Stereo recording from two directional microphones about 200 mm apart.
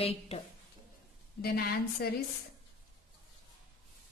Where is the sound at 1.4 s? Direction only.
50° left (ahead or behind).